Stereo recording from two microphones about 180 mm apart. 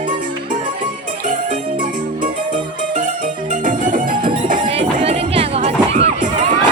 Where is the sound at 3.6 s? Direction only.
45° right (ahead or behind).